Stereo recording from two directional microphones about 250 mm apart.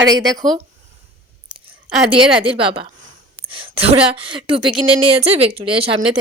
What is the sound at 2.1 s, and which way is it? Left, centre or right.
Speech, right.